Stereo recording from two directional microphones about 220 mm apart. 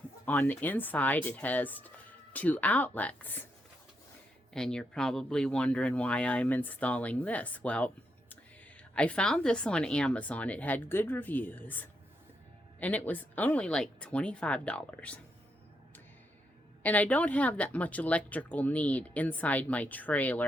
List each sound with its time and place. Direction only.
0.3 s speech: 10° left (ahead or behind)
4.5 s speech: 5° left (ahead or behind)
9.0 s speech: 5° left (ahead or behind)
16.8 s speech: 5° left (ahead or behind)